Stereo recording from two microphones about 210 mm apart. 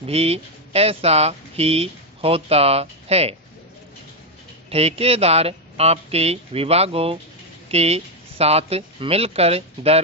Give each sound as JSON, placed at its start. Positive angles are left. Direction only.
{"t": 0.0, "sound": "speech", "side_deg": -30}
{"t": 4.7, "sound": "speech", "side_deg": -30}